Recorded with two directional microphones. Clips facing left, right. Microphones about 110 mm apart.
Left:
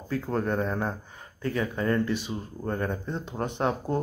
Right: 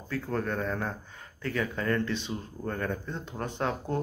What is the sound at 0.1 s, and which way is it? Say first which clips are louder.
Speech: left 3 dB; 20° left (ahead or behind).